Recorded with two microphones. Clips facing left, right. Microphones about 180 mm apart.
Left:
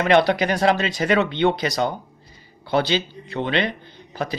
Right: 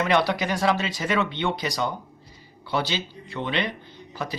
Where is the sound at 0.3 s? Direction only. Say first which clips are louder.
Left 5 dB; 70° left (ahead or behind); by 3.7 s 90° left.